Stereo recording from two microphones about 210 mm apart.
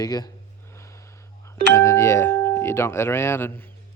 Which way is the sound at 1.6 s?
15° left (ahead or behind).